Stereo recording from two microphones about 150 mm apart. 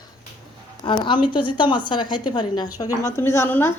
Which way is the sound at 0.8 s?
30° left (ahead or behind).